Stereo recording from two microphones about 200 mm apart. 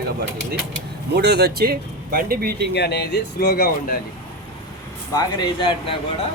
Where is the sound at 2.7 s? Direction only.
55° left (ahead or behind).